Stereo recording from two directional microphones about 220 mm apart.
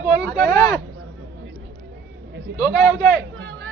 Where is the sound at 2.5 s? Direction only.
5° right (ahead or behind).